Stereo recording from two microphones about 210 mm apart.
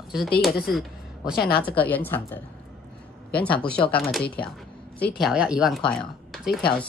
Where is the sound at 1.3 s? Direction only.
45° left (ahead or behind).